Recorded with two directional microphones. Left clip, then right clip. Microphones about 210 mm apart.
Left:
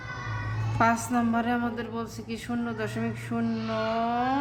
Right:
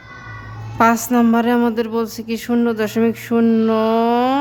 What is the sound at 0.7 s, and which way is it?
Speech, 50° right (ahead or behind).